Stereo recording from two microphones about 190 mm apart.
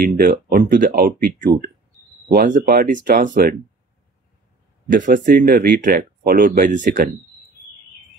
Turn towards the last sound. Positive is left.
turn(degrees=-40)  # may be behind; listen again after turning